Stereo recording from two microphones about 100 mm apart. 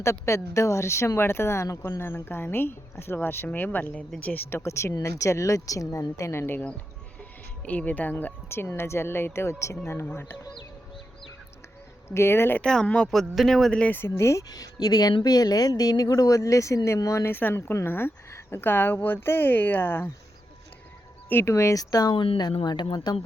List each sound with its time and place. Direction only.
0.0 s speech: 30° left (ahead or behind)
12.0 s speech: 25° left (ahead or behind)
12.6 s speech: 10° left (ahead or behind); by 14.4 s 25° left (ahead or behind)
14.5 s speech: 40° left (ahead or behind); by 20.1 s 20° left (ahead or behind)
21.2 s speech: 25° left (ahead or behind)
22.1 s speech: 60° left (ahead or behind)
22.6 s speech: 45° left (ahead or behind)